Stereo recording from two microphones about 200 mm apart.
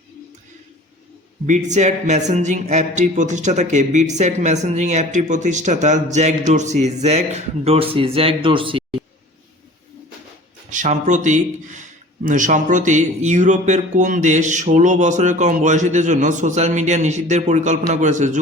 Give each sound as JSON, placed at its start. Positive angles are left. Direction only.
{"t": 1.5, "sound": "a man's voice", "side_deg": -35}
{"t": 10.7, "sound": "a man's voice", "side_deg": -40}